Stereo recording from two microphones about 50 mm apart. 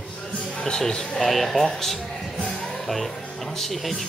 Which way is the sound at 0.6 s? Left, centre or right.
Centre.